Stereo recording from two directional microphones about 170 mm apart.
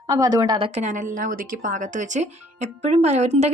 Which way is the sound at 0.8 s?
50° right (ahead or behind).